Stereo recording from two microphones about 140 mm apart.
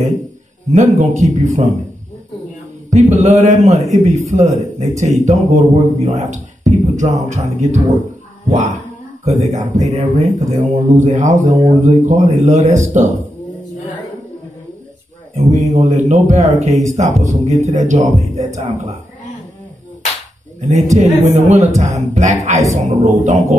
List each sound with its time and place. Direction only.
0.7 s speech: 60° right (ahead or behind)
2.9 s speech: 55° right (ahead or behind)
15.7 s speech: 55° right (ahead or behind)
20.9 s speech: 55° right (ahead or behind)